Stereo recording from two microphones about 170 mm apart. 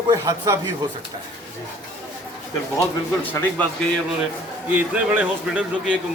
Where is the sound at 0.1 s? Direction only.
20° right (ahead or behind).